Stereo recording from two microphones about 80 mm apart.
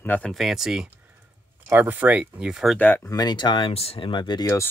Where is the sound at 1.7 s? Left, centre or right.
Right.